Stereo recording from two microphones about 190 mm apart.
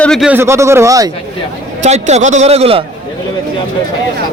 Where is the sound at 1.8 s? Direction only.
35° right (ahead or behind).